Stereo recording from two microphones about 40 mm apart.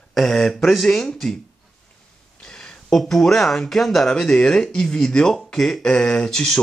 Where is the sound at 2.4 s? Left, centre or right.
Centre.